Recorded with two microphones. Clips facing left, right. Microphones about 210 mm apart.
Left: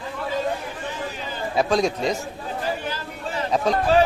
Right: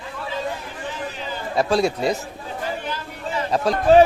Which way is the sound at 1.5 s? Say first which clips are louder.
Right 1 dB; centre (ahead or behind).